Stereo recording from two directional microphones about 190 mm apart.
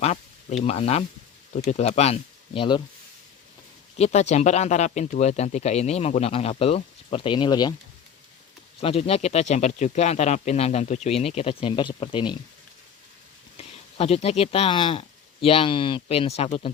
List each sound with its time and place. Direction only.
0.0 s speech: 35° left (ahead or behind)
3.9 s speech: 35° left (ahead or behind)
8.8 s speech: 30° left (ahead or behind)
13.6 s speech: 30° left (ahead or behind)